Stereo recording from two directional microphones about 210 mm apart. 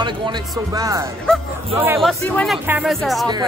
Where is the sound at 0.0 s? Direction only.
20° right (ahead or behind).